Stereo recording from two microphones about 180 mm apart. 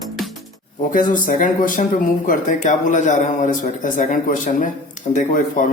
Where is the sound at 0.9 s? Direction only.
45° left (ahead or behind).